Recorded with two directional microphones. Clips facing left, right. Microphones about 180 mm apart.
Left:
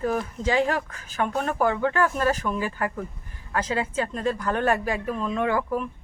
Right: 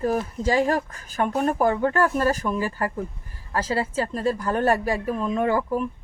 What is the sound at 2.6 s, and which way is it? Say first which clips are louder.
Speech: right 2 dB; 40° right (ahead or behind).